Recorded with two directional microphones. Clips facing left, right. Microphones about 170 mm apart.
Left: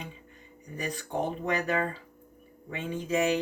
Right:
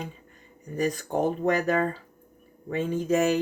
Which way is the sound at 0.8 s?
45° right (ahead or behind).